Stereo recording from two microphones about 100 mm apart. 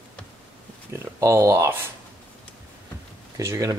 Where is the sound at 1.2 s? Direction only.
30° right (ahead or behind).